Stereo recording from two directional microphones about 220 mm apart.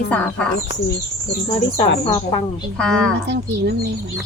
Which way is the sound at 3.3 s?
50° right (ahead or behind).